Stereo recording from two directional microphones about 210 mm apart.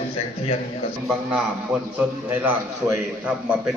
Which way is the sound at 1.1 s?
5° right (ahead or behind).